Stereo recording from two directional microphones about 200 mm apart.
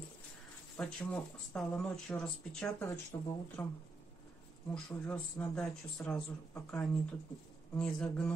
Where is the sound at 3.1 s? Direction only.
20° left (ahead or behind).